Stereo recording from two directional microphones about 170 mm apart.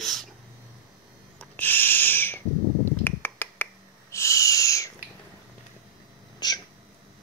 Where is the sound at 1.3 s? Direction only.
10° left (ahead or behind).